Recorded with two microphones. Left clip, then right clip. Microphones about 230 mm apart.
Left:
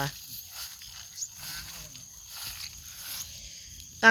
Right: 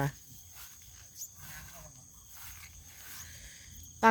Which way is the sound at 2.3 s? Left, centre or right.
Left.